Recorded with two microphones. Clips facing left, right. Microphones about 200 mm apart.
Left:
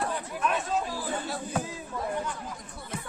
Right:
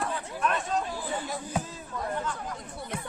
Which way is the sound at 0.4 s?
Centre (ahead or behind).